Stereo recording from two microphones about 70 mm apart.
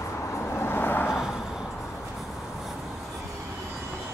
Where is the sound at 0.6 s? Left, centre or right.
Left.